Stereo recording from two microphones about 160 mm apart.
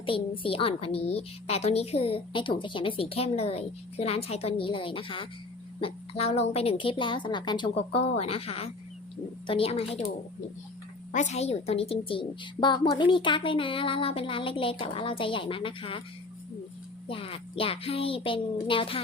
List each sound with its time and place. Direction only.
0.0 s a woman's voice: 35° left (ahead or behind)
11.1 s a woman's voice: 45° left (ahead or behind)
17.1 s a woman's voice: 35° left (ahead or behind)